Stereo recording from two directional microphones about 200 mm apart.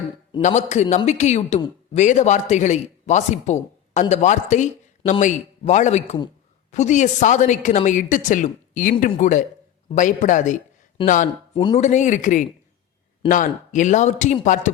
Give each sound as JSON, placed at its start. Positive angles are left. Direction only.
{"t": 0.4, "sound": "a man's voice", "side_deg": 35}
{"t": 11.5, "sound": "speech", "side_deg": 20}
{"t": 11.8, "sound": "a man's voice", "side_deg": 35}